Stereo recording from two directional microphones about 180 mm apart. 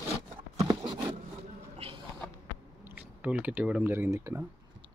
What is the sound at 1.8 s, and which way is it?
Rodents, 35° right (ahead or behind).